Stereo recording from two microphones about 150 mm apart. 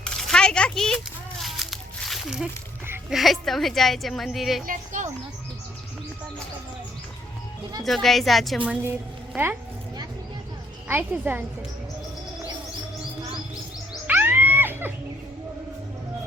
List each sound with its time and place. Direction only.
0.0 s a sound: 5° left (ahead or behind)
3.1 s a woman's voice: centre (ahead or behind)
4.6 s speech: 60° right (ahead or behind)
7.9 s a woman's voice: centre (ahead or behind)
10.8 s a woman's voice: 15° right (ahead or behind)
13.9 s music: 10° right (ahead or behind)